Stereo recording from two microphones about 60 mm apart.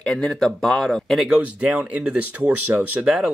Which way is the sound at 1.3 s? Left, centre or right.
Right.